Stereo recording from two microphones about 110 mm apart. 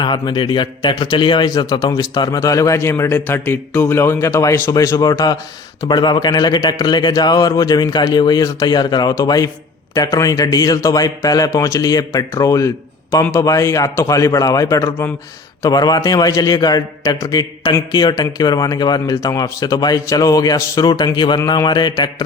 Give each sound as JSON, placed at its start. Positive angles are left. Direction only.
{"t": 0.0, "sound": "a man's voice", "side_deg": 45}